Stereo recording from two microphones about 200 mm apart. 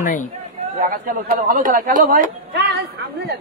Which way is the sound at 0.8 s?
45° right (ahead or behind).